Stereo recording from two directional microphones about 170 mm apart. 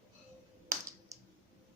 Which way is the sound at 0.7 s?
15° right (ahead or behind).